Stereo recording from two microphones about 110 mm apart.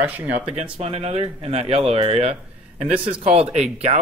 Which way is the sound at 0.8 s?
65° right (ahead or behind).